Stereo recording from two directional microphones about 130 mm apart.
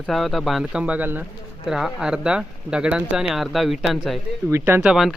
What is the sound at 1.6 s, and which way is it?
Speech, 5° right (ahead or behind).